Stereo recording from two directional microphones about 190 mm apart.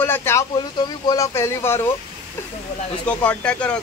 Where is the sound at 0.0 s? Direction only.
10° left (ahead or behind).